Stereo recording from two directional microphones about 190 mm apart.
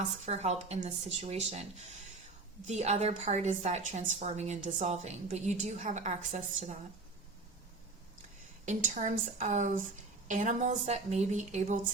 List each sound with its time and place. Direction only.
0.3 s a woman's voice: 35° right (ahead or behind)
8.6 s a woman's voice: 40° right (ahead or behind)